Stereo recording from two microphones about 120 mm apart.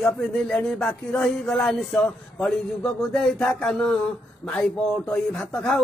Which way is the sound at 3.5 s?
5° left (ahead or behind).